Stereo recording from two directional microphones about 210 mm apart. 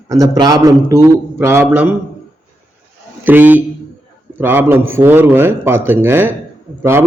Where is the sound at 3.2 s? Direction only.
10° right (ahead or behind).